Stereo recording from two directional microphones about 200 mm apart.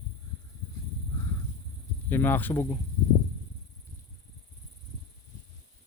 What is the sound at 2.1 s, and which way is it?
Speech, 10° left (ahead or behind).